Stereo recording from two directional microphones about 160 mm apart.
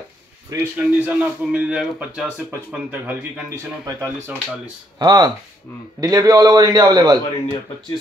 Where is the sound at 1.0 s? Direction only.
5° right (ahead or behind).